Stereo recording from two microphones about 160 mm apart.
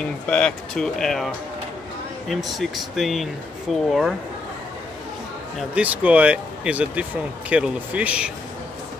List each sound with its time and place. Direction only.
0.0 s speech: 5° left (ahead or behind)
5.6 s speech: 10° right (ahead or behind)